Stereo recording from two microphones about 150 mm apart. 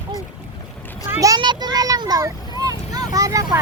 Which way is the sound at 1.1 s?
25° right (ahead or behind).